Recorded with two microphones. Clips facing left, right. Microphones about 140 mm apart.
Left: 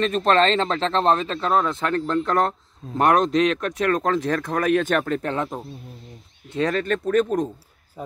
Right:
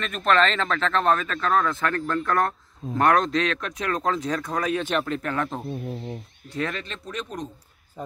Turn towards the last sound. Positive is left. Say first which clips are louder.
# left 13 dB
turn(degrees=50)  # may be behind; listen again after turning